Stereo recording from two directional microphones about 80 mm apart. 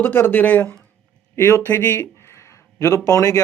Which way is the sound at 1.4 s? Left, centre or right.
Left.